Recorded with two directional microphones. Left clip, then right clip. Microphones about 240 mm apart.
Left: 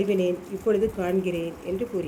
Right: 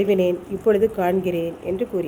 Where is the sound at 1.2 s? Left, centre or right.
Right.